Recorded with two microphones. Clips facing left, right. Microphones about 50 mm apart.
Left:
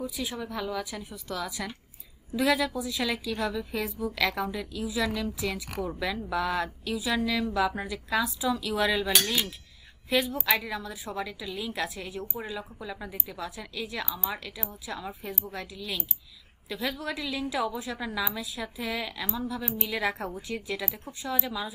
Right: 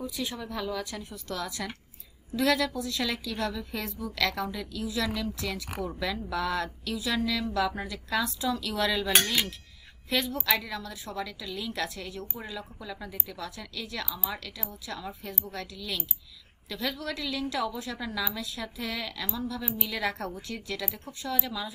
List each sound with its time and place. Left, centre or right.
0.0 s a woman's voice: centre
14.0 s a woman's voice: centre
14.3 s a woman's voice: centre